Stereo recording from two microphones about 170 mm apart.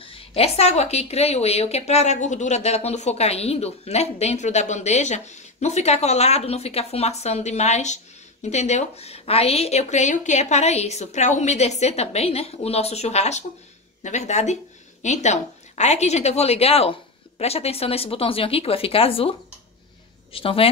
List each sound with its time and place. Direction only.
0.0 s a woman's voice: 35° left (ahead or behind)
20.3 s a woman's voice: 35° left (ahead or behind)